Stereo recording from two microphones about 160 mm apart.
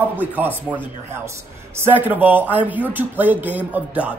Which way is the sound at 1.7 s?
15° right (ahead or behind).